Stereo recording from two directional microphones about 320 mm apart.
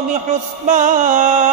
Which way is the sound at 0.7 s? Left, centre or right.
Right.